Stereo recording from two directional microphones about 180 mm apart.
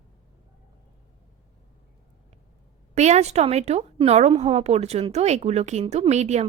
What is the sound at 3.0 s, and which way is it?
A woman's voice, 40° right (ahead or behind).